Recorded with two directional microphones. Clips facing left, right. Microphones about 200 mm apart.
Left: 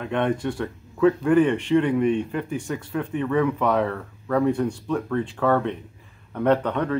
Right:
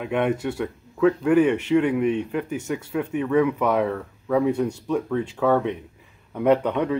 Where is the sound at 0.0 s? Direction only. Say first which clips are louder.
Right 1 dB; 10° right (ahead or behind).